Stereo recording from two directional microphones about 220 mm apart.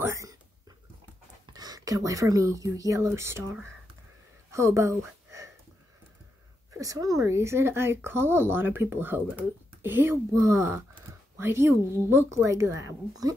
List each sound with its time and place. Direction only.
0.0 s whispering: 15° right (ahead or behind)
1.4 s speech: 20° right (ahead or behind)
4.5 s a sound: 15° right (ahead or behind)
6.8 s speech: 15° right (ahead or behind)